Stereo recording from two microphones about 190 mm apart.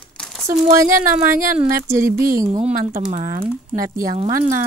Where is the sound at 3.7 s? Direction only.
20° right (ahead or behind).